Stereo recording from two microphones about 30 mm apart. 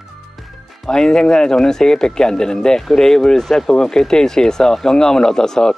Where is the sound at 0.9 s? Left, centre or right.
Left.